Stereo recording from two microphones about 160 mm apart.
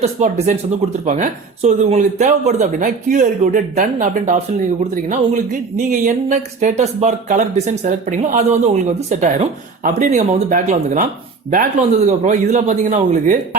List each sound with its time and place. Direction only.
0.0 s speech: 45° right (ahead or behind)